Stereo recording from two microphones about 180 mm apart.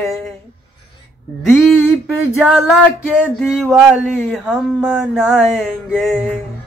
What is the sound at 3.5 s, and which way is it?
Music, centre (ahead or behind).